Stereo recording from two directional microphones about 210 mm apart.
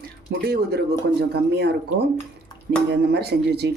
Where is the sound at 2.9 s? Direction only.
50° right (ahead or behind).